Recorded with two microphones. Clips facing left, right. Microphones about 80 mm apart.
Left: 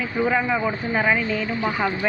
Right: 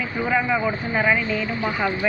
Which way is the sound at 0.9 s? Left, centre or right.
Left.